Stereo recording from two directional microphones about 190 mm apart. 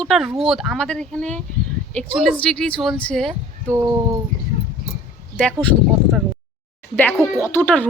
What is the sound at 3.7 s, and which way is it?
Speech, 15° right (ahead or behind).